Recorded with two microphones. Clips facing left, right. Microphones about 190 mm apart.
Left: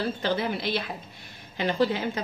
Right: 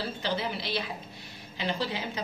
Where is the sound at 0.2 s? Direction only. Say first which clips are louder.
Left 5 dB; 50° left (ahead or behind).